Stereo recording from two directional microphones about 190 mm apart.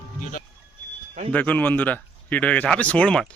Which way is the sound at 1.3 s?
10° left (ahead or behind).